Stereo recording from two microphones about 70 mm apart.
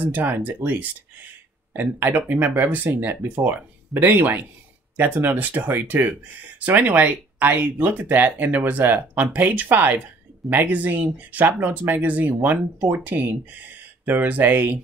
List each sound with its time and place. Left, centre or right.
0.0 s speech: right